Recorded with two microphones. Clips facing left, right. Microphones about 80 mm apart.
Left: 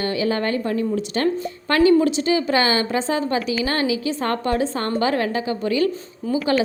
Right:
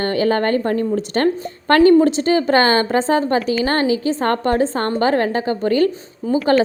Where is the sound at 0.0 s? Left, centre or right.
Right.